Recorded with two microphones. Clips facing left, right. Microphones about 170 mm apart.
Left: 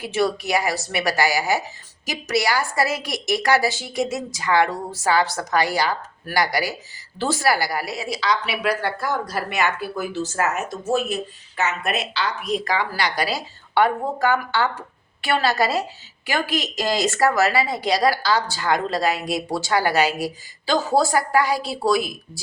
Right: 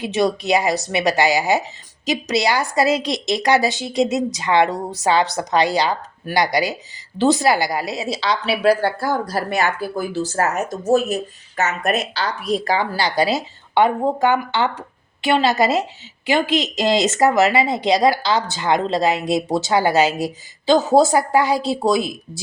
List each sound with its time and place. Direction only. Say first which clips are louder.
0.0 s a woman's voice: right 3 dB; 20° right (ahead or behind)